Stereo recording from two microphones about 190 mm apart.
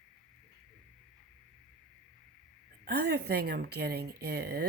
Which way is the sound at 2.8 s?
60° right (ahead or behind).